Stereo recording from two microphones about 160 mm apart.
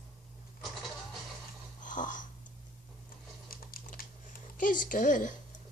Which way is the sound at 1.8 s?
55° left (ahead or behind).